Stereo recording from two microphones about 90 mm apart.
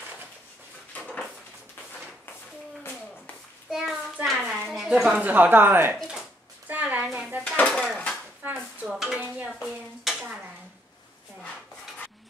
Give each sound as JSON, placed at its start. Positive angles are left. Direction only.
{"t": 1.0, "sound": "a sound", "side_deg": 5}
{"t": 3.7, "sound": "hands", "side_deg": -5}
{"t": 4.7, "sound": "a woman's voice", "side_deg": -5}
{"t": 6.7, "sound": "a sound", "side_deg": -20}
{"t": 7.2, "sound": "dishes", "side_deg": -15}
{"t": 7.5, "sound": "dishes", "side_deg": 10}
{"t": 8.4, "sound": "a sound", "side_deg": -20}
{"t": 8.8, "sound": "stir", "side_deg": -5}
{"t": 9.5, "sound": "dishes", "side_deg": -5}